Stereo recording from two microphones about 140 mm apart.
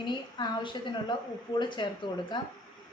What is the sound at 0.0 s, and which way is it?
A woman's voice, 30° left (ahead or behind).